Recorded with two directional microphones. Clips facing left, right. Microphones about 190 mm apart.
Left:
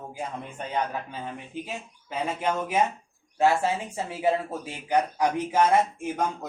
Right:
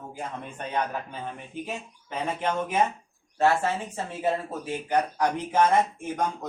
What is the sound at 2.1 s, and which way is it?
Speech, 10° left (ahead or behind).